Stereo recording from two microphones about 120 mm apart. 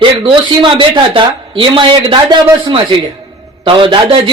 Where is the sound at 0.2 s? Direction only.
40° right (ahead or behind).